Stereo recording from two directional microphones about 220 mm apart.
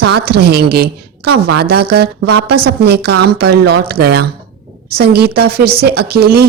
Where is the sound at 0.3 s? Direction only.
45° right (ahead or behind).